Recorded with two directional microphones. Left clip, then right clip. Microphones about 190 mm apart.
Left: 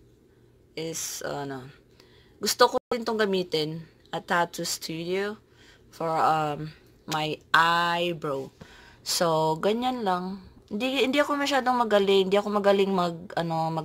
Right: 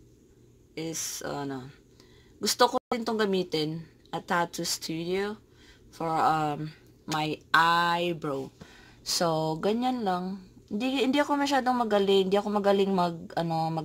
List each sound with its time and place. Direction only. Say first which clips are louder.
1.0 s speech: left 2 dB; 15° right (ahead or behind)